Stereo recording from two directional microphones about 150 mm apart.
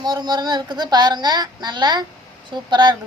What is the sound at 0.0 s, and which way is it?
A woman's voice, 30° right (ahead or behind).